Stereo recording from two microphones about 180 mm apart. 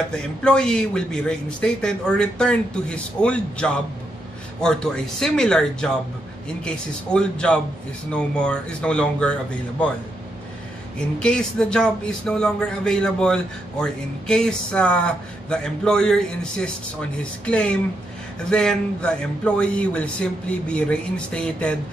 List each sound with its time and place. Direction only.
0.1 s a man's voice: 5° left (ahead or behind)
11.1 s a man's voice: 5° left (ahead or behind)